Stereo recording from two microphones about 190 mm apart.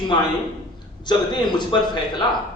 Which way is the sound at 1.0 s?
25° left (ahead or behind).